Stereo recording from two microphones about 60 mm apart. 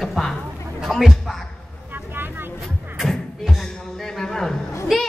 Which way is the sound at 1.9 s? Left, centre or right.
Right.